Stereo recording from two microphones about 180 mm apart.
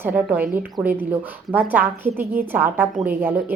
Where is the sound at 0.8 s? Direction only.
25° right (ahead or behind).